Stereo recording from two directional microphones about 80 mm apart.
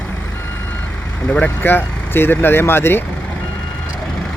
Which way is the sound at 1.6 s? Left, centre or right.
Left.